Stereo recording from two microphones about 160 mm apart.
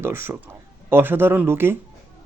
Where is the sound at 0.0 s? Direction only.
15° right (ahead or behind).